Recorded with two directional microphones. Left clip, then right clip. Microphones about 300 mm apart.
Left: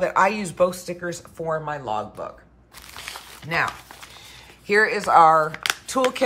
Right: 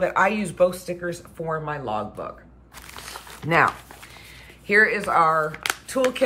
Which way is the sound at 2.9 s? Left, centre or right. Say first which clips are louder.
Left 2 dB; centre.